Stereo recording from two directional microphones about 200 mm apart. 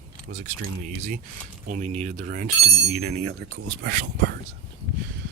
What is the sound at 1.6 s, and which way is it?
Speech, 35° right (ahead or behind).